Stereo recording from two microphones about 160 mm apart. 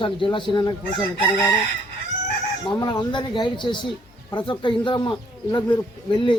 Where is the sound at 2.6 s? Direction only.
25° left (ahead or behind).